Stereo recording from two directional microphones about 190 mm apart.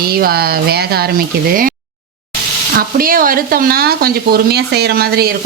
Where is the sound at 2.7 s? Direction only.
50° right (ahead or behind).